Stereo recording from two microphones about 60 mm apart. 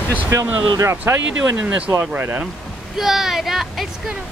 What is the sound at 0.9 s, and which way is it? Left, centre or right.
Speech, right.